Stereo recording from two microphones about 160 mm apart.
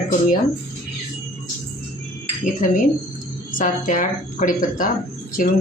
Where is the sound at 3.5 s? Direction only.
55° left (ahead or behind).